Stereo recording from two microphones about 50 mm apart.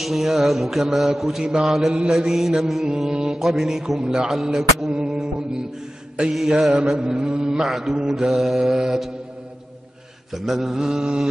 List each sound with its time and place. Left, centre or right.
0.0 s mantra: centre
1.4 s mantra: centre
1.7 s mantra: centre
4.9 s music: centre
6.3 s mantra: centre
7.6 s mantra: centre
10.3 s mantra: centre